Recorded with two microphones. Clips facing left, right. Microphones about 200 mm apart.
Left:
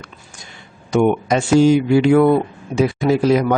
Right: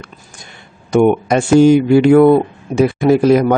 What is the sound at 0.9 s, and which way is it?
Speech, 50° right (ahead or behind).